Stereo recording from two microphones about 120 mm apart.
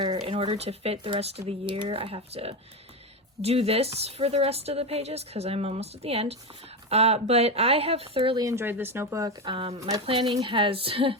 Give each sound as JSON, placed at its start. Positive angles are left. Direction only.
{"t": 0.3, "sound": "speech", "side_deg": -50}
{"t": 8.4, "sound": "speech", "side_deg": -20}
{"t": 9.4, "sound": "a woman's voice", "side_deg": -50}